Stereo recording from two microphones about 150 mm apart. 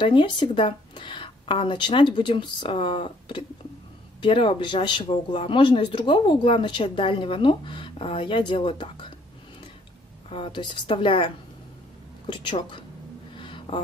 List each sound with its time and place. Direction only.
0.0 s a woman's voice: 30° left (ahead or behind)
10.3 s a woman's voice: 35° left (ahead or behind)
13.4 s a sound: 35° left (ahead or behind)